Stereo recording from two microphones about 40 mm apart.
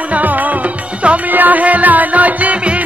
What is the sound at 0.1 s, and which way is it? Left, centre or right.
Music, right.